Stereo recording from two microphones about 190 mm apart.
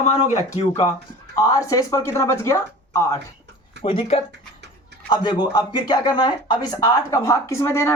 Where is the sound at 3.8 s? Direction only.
30° left (ahead or behind).